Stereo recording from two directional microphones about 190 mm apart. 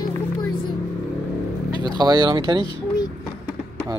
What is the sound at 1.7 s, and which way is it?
Speech, 20° right (ahead or behind).